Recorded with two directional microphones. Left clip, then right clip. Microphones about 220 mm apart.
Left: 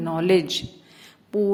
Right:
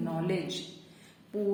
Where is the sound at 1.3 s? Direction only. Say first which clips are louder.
Left 10 dB; 45° left (ahead or behind).